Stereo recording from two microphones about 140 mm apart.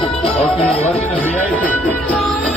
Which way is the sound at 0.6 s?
45° left (ahead or behind).